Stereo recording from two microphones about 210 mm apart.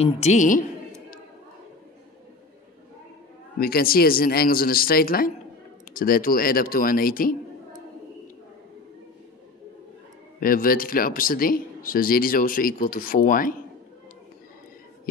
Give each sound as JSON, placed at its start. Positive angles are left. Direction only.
{"t": 0.0, "sound": "a woman's voice", "side_deg": 30}
{"t": 3.5, "sound": "speech", "side_deg": 45}
{"t": 10.4, "sound": "speech", "side_deg": 45}